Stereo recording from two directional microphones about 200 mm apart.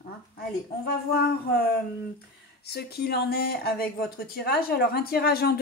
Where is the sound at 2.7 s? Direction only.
50° left (ahead or behind).